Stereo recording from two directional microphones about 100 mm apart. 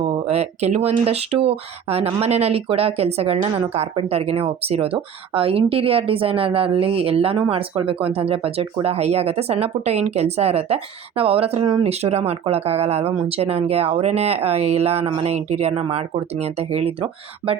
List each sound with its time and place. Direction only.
0.1 s speech: 90° right
11.2 s speech: 70° right (ahead or behind)
11.8 s speech: 90° right
13.2 s speech: 80° right